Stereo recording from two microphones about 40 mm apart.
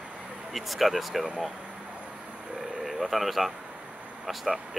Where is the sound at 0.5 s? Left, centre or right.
Centre.